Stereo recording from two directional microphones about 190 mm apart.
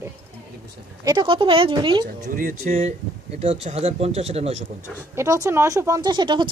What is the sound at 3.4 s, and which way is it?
Speech, 30° right (ahead or behind).